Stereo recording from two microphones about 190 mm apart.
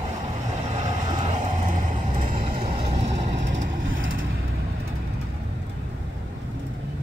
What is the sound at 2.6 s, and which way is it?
Vehicle, 30° right (ahead or behind).